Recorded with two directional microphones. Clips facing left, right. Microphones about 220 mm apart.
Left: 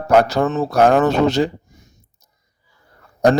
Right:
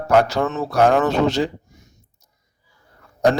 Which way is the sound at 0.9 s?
45° left (ahead or behind).